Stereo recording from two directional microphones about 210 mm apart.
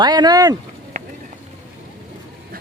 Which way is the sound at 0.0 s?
20° right (ahead or behind).